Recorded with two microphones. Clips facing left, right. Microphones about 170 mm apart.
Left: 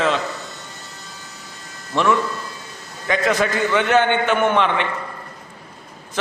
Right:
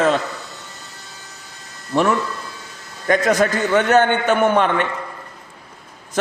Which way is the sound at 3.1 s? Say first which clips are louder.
Right 3 dB; 45° right (ahead or behind).